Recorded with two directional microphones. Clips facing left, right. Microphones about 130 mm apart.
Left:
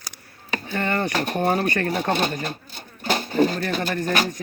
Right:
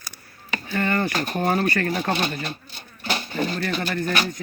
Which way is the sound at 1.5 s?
20° left (ahead or behind).